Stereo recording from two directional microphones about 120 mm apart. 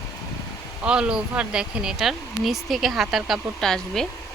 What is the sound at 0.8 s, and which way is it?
Speech, 5° right (ahead or behind).